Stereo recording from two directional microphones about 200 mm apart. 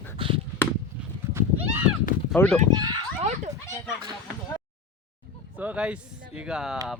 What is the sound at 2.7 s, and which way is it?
Speech, 20° right (ahead or behind).